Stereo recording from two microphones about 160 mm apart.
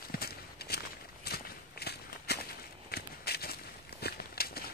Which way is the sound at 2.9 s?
75° left (ahead or behind).